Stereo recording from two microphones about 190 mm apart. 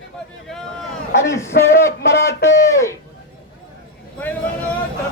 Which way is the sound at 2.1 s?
15° left (ahead or behind).